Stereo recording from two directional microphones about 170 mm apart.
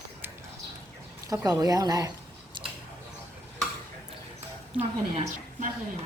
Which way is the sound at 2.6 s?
25° right (ahead or behind).